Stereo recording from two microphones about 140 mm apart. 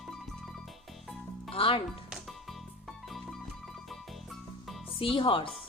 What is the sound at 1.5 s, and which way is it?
Speech, 40° left (ahead or behind).